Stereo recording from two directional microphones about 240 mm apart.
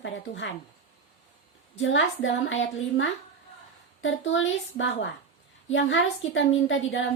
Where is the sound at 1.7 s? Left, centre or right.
Left.